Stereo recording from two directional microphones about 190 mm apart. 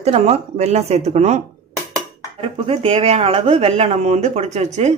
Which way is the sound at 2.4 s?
30° right (ahead or behind).